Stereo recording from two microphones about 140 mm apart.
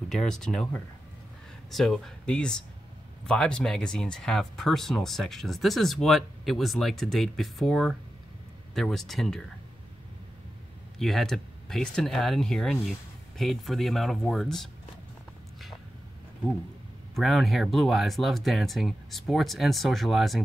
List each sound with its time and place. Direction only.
0.1 s speech: 5° left (ahead or behind)
11.0 s speech: centre (ahead or behind)
17.1 s speech: centre (ahead or behind)